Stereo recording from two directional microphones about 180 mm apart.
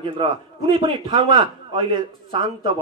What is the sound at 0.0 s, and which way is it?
A man's voice, 25° right (ahead or behind).